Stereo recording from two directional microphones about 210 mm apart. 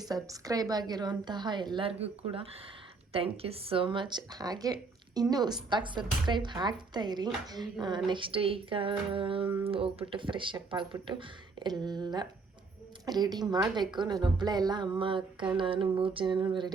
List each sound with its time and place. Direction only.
0.0 s speech: 15° right (ahead or behind)